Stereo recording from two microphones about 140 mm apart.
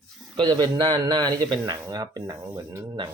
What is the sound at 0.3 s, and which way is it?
Speech, 30° right (ahead or behind).